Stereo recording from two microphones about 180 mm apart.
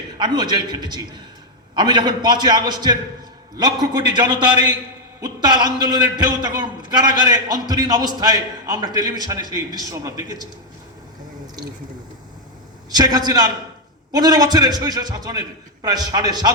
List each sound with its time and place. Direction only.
0.2 s a man's voice: 25° right (ahead or behind)
12.9 s a man's voice: 20° right (ahead or behind)